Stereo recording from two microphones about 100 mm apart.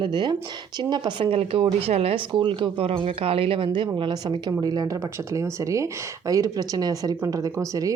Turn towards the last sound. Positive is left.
turn(degrees=-35)  # may be behind; listen again after turning